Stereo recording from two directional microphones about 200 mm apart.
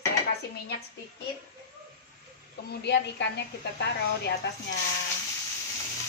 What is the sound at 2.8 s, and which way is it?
A woman's voice, 55° left (ahead or behind).